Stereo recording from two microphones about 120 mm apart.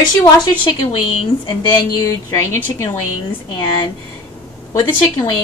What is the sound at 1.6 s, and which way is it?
Speech, 30° left (ahead or behind).